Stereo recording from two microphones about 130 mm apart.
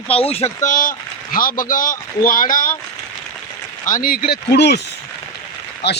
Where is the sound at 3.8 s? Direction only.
90° left.